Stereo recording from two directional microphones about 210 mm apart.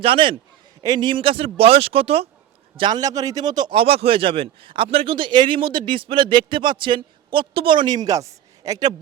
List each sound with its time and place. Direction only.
0.0 s a man's voice: 25° right (ahead or behind)